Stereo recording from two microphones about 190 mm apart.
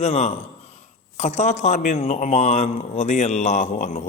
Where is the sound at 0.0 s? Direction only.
35° left (ahead or behind).